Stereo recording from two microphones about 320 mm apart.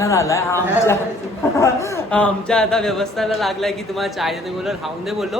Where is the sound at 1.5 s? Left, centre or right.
Centre.